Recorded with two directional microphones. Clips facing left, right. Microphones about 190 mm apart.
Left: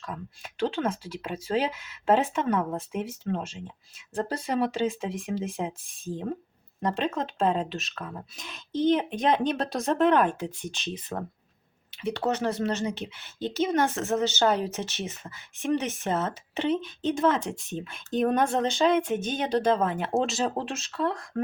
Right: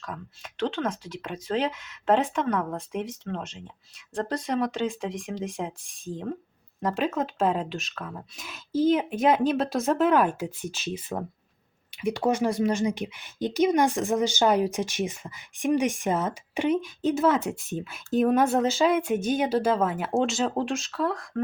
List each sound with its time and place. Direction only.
0.0 s a woman's voice: 5° left (ahead or behind)